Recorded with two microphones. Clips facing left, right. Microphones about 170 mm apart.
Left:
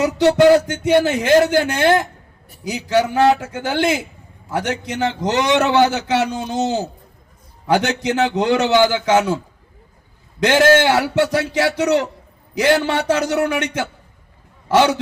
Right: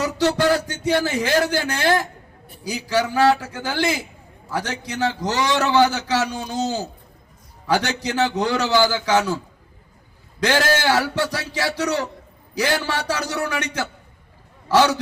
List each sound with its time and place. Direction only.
0.0 s a man's voice: 20° left (ahead or behind)
10.4 s a man's voice: 20° left (ahead or behind)